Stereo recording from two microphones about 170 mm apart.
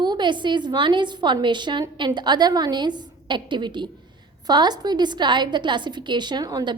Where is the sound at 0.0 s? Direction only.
25° right (ahead or behind).